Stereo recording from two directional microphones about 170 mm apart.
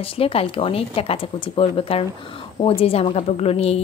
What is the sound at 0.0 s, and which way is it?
A woman's voice, 35° left (ahead or behind).